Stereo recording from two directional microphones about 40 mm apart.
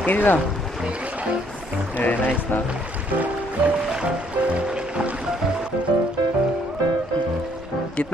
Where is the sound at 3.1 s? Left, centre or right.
Right.